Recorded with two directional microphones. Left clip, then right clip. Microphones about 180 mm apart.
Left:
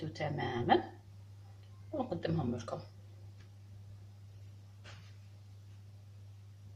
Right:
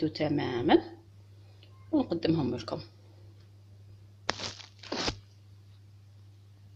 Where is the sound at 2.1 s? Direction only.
45° right (ahead or behind).